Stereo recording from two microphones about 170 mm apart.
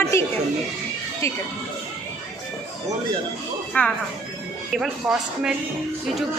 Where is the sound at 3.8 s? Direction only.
10° left (ahead or behind).